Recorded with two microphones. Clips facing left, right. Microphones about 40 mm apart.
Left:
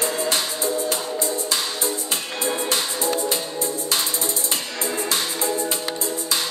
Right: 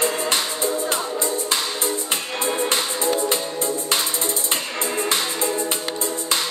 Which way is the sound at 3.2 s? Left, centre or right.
Right.